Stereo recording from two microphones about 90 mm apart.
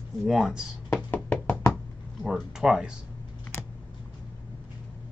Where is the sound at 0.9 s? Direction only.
15° left (ahead or behind).